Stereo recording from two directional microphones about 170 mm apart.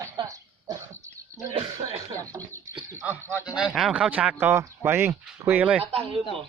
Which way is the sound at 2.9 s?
15° right (ahead or behind).